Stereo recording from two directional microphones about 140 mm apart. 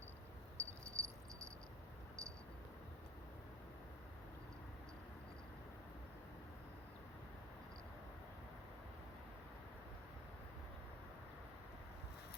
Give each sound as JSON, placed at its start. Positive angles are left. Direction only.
{"t": 0.6, "sound": "cricket", "side_deg": -15}